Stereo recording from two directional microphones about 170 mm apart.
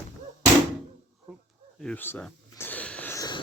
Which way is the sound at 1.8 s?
10° left (ahead or behind).